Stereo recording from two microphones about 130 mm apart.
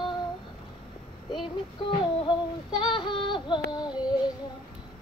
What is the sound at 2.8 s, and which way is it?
Female singing, 40° left (ahead or behind).